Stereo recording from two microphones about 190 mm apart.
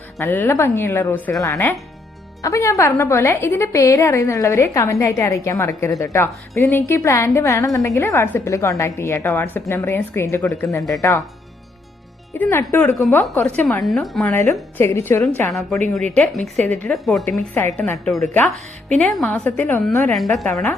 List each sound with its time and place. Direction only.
0.2 s a woman's voice: 10° left (ahead or behind)
12.4 s a woman's voice: 10° left (ahead or behind)